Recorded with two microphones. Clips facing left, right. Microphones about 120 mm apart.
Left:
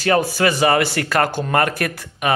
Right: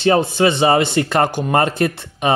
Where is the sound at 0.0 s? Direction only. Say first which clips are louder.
Right 3 dB; 25° right (ahead or behind).